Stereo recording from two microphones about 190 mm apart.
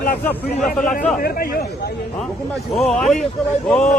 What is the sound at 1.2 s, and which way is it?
Speech, 50° left (ahead or behind).